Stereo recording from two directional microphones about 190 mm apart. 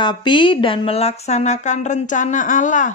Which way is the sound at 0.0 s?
25° left (ahead or behind).